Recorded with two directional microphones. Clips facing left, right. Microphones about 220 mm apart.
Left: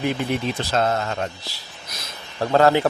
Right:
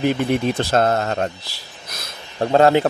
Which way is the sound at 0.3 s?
55° right (ahead or behind).